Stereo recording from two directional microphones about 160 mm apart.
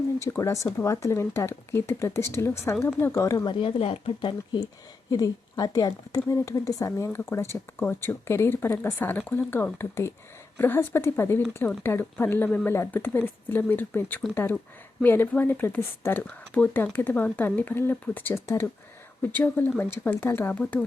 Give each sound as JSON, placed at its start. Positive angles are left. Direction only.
{"t": 0.2, "sound": "speech", "side_deg": 20}